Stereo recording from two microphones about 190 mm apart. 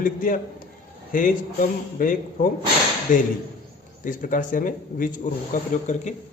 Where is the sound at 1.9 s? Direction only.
45° left (ahead or behind).